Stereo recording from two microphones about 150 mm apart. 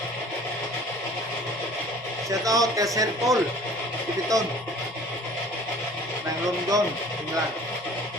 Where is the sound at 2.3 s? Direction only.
20° right (ahead or behind).